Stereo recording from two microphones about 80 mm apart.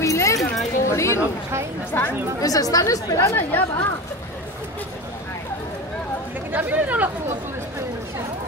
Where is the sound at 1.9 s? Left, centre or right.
Left.